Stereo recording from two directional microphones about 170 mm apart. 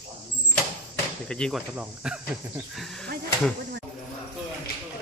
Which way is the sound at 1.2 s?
5° left (ahead or behind).